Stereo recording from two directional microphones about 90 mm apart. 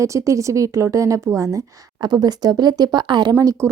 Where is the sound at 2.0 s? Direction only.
50° right (ahead or behind).